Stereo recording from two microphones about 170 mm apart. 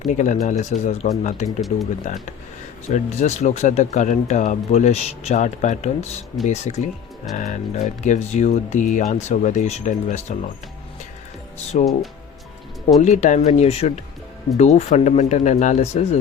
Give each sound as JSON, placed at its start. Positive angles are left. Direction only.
{"t": 0.1, "sound": "speech", "side_deg": 45}
{"t": 2.9, "sound": "speech", "side_deg": 45}
{"t": 11.7, "sound": "speech", "side_deg": 40}
{"t": 13.0, "sound": "speech", "side_deg": 45}